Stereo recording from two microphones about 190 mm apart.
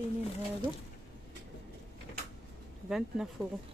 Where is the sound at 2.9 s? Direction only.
Centre (ahead or behind).